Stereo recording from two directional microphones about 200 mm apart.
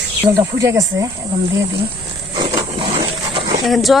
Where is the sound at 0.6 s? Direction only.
15° right (ahead or behind).